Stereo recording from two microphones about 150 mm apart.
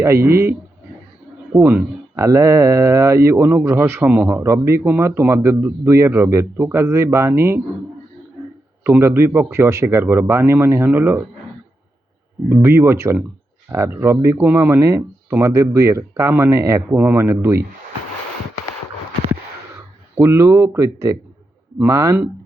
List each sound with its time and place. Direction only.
0.3 s a man's voice: 20° right (ahead or behind)
1.5 s a man's voice: 15° right (ahead or behind)
8.8 s a man's voice: 15° right (ahead or behind)
12.6 s a man's voice: 15° right (ahead or behind)
20.1 s speech: 15° right (ahead or behind)